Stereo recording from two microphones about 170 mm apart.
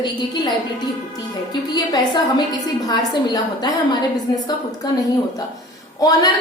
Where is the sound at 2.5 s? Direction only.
25° left (ahead or behind).